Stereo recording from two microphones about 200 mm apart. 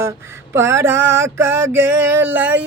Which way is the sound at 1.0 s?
70° right (ahead or behind).